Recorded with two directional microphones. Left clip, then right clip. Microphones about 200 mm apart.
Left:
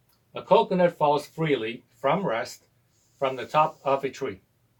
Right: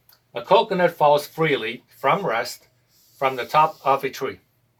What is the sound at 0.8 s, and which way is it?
Speech, 15° right (ahead or behind).